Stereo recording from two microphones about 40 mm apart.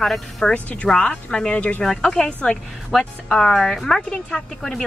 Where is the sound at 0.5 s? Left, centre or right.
Left.